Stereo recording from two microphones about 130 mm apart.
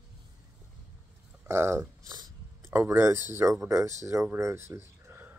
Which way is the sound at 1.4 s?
20° right (ahead or behind).